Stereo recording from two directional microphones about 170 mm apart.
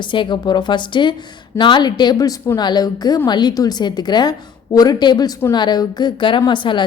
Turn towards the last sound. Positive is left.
turn(degrees=30)  # may be behind; listen again after turning